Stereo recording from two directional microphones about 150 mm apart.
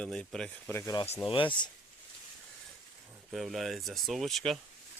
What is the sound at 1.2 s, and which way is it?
Speech, 35° left (ahead or behind).